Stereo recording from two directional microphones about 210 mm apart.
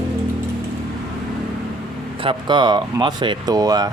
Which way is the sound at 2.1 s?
25° right (ahead or behind).